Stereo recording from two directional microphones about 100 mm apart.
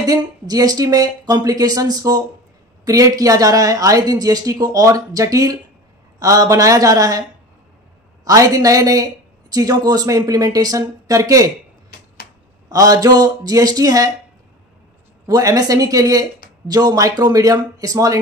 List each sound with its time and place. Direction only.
0.0 s speech: 40° right (ahead or behind)
8.3 s speech: 35° right (ahead or behind)
12.6 s speech: 35° right (ahead or behind)
15.2 s speech: 35° right (ahead or behind)